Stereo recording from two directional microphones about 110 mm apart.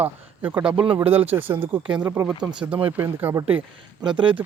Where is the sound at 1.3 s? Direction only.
20° right (ahead or behind).